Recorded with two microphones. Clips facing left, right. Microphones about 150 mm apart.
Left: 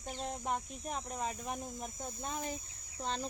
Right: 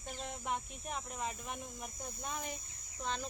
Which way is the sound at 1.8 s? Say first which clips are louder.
Left 3 dB; 25° left (ahead or behind).